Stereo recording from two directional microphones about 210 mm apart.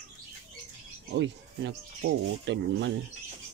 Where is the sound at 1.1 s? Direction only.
55° right (ahead or behind).